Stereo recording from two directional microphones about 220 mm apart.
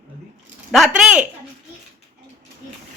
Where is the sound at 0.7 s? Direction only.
Centre (ahead or behind).